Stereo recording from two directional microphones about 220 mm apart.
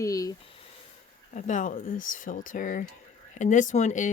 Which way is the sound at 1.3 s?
35° left (ahead or behind).